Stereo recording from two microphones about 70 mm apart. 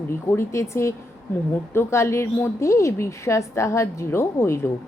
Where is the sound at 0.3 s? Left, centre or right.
Left.